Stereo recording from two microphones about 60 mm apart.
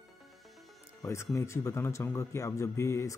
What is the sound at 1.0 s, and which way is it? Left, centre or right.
Speech, left.